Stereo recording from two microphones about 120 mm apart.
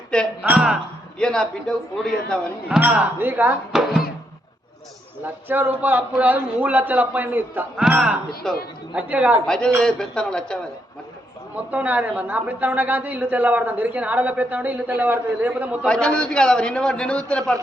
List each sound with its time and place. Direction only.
1.2 s a man's voice: 5° left (ahead or behind)
2.6 s a woman's voice: 10° right (ahead or behind)
3.7 s a man's voice: 5° right (ahead or behind)
5.2 s a woman's voice: 15° right (ahead or behind)
8.4 s a man's voice: 5° left (ahead or behind)
8.9 s a woman's voice: 10° right (ahead or behind)
9.5 s a man's voice: 5° left (ahead or behind)
11.5 s a woman's voice: 15° right (ahead or behind)
15.9 s a man's voice: 10° left (ahead or behind)